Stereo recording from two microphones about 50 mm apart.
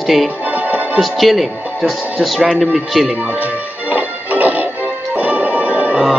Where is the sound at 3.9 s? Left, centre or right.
Right.